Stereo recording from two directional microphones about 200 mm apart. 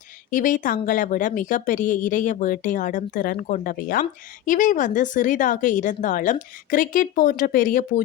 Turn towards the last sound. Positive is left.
turn(degrees=45)  # may be behind; listen again after turning